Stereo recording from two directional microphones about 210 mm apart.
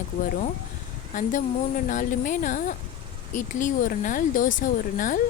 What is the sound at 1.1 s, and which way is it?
Speech, 40° left (ahead or behind).